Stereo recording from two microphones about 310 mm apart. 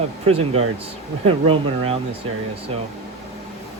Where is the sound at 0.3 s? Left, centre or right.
Centre.